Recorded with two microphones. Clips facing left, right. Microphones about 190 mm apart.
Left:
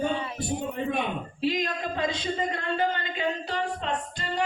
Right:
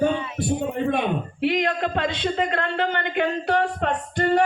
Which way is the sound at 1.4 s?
65° right (ahead or behind).